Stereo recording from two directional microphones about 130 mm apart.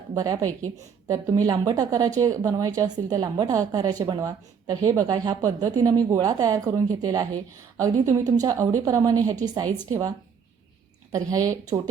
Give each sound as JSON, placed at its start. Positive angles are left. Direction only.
{"t": 0.1, "sound": "speech", "side_deg": -30}
{"t": 11.1, "sound": "speech", "side_deg": -25}